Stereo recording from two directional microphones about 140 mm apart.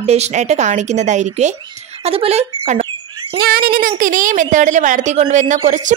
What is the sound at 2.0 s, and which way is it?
Speech, 45° right (ahead or behind).